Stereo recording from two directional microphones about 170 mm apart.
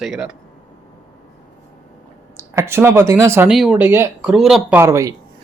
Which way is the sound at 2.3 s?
15° right (ahead or behind).